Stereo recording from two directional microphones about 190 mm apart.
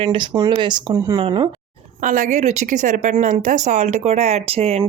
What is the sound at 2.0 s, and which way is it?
Speech, 40° right (ahead or behind).